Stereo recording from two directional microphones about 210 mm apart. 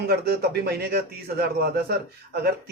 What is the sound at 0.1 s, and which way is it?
Speech, 50° right (ahead or behind).